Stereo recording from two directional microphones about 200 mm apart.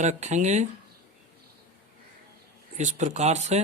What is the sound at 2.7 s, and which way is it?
Speech, 35° right (ahead or behind).